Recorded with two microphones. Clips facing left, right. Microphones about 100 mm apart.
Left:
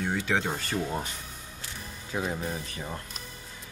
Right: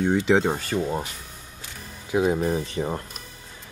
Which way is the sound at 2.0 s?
15° right (ahead or behind).